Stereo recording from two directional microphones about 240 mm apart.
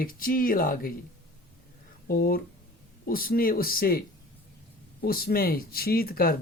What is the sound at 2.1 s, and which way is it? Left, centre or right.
Speech, left.